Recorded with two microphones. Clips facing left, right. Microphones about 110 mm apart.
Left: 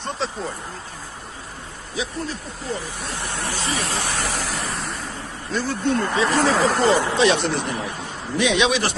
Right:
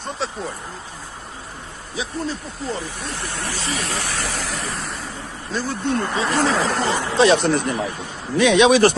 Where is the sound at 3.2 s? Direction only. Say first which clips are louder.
Left 2 dB; 20° left (ahead or behind).